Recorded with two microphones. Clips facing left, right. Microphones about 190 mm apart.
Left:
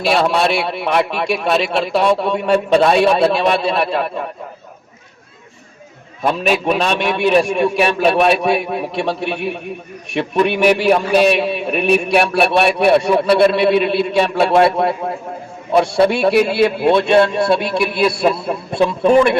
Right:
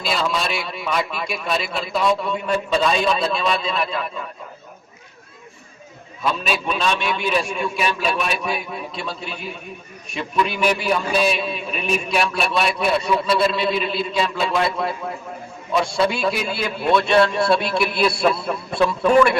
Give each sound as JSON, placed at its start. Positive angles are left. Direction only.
{"t": 0.0, "sound": "a man's voice", "side_deg": 70}
{"t": 6.2, "sound": "a man's voice", "side_deg": 65}
{"t": 17.2, "sound": "a man's voice", "side_deg": 20}